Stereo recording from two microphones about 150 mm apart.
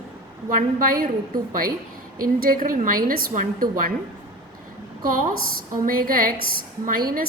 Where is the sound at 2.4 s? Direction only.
65° right (ahead or behind).